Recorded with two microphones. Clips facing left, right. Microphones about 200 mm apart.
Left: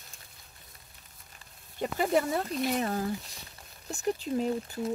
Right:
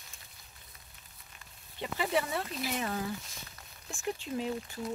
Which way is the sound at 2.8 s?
35° left (ahead or behind).